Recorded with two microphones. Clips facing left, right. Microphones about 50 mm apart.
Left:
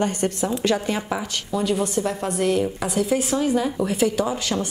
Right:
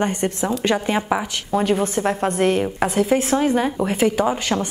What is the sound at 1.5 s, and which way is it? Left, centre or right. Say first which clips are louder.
A woman's voice: right 3 dB; right.